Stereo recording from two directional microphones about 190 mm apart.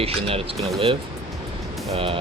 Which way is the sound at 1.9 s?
30° right (ahead or behind).